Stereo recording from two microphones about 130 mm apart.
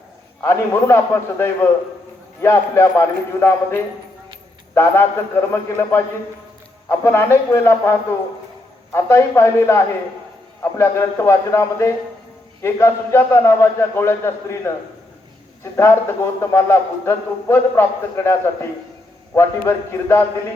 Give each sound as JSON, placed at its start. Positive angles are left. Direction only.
{"t": 0.4, "sound": "a man's voice", "side_deg": 20}
{"t": 15.7, "sound": "a man's voice", "side_deg": 20}